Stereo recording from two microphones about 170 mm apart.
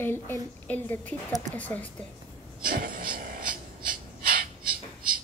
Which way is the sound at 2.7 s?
55° right (ahead or behind).